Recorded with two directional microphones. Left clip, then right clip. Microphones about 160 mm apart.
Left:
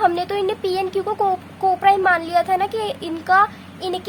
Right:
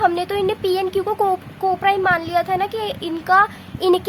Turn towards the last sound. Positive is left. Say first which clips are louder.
# right 8 dB
turn(degrees=-15)  # may be behind; listen again after turning